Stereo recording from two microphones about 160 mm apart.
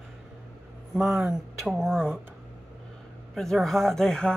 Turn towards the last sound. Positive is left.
turn(degrees=5)  # may be behind; listen again after turning